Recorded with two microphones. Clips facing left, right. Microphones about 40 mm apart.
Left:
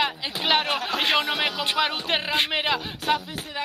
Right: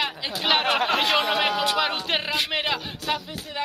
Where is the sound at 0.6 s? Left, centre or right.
Right.